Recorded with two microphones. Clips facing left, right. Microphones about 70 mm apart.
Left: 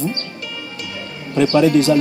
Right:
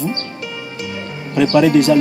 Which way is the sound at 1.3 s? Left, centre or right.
Left.